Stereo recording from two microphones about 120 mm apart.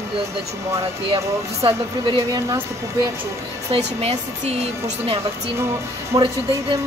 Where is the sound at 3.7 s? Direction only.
55° right (ahead or behind).